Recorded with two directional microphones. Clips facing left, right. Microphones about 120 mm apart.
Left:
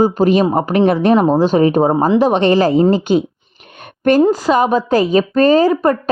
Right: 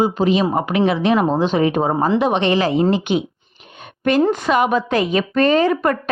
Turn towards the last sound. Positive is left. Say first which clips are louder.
# left 4 dB
turn(degrees=30)  # may be behind; listen again after turning